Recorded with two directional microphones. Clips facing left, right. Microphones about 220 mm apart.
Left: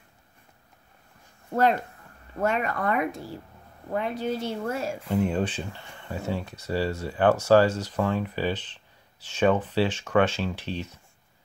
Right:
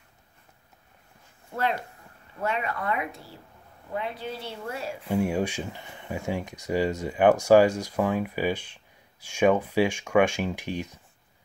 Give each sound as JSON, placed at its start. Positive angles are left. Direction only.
{"t": 1.5, "sound": "a woman's voice", "side_deg": 45}
{"t": 5.0, "sound": "speech", "side_deg": -10}